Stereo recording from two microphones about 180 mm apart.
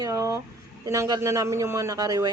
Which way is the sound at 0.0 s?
20° right (ahead or behind).